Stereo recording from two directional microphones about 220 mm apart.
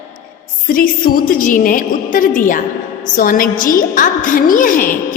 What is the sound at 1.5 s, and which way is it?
A woman's voice, 40° left (ahead or behind).